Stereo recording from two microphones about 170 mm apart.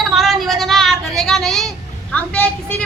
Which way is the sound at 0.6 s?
Centre (ahead or behind).